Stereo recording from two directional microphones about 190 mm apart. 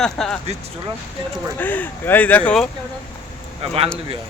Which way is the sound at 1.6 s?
10° left (ahead or behind).